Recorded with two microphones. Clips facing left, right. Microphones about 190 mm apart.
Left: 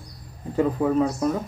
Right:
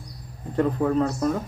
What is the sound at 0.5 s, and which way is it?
Speech, 5° left (ahead or behind).